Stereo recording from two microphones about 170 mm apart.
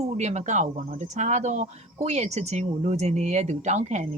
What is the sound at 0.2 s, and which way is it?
Speech, 40° right (ahead or behind).